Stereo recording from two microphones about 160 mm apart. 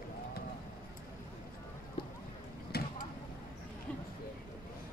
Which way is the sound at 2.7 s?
75° left (ahead or behind).